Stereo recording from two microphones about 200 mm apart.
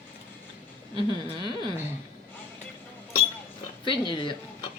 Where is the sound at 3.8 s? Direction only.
25° left (ahead or behind).